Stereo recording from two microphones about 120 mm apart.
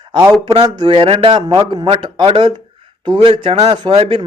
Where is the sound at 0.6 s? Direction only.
45° right (ahead or behind).